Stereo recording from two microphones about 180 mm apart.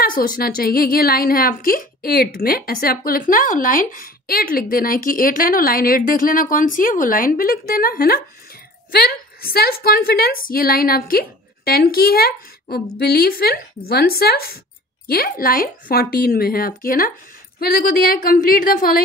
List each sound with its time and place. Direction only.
0.0 s a woman's voice: 50° left (ahead or behind)